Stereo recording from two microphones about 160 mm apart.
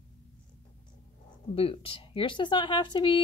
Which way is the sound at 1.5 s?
35° left (ahead or behind).